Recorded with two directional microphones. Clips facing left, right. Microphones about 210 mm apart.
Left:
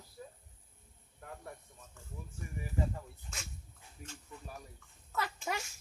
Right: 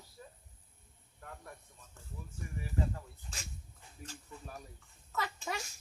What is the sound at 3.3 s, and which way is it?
Speech, 35° right (ahead or behind).